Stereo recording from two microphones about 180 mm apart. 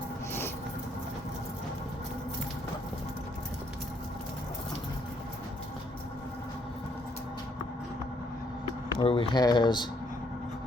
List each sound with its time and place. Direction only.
9.0 s speech: 30° left (ahead or behind)